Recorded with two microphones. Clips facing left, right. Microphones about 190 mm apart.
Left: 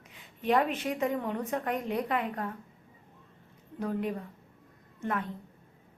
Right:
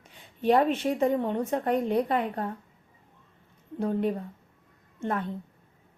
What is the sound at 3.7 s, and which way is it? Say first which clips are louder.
A woman's voice: right 5 dB; 30° right (ahead or behind).